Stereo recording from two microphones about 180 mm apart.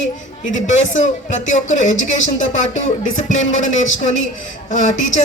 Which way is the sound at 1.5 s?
45° left (ahead or behind).